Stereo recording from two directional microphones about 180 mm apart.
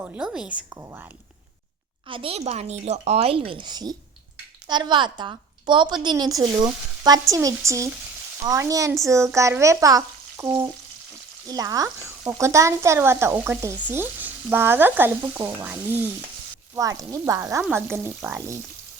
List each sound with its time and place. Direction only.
0.0 s speech: 5° right (ahead or behind)
2.0 s a woman's voice: 30° right (ahead or behind)